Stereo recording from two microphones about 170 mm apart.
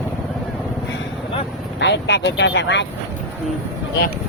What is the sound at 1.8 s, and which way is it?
Speech, 90° left.